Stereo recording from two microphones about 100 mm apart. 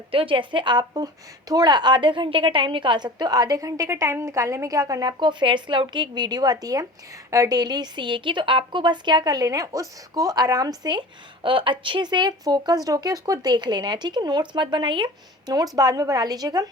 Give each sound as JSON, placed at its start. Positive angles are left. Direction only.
{"t": 0.1, "sound": "a woman's voice", "side_deg": -65}
{"t": 11.4, "sound": "a woman's voice", "side_deg": -55}